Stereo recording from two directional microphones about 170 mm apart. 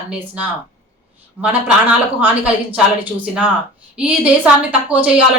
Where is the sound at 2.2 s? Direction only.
10° right (ahead or behind).